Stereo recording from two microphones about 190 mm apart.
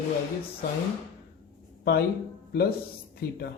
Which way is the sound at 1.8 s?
60° left (ahead or behind).